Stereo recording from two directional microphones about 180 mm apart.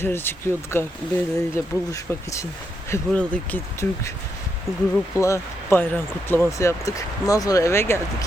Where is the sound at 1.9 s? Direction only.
15° left (ahead or behind).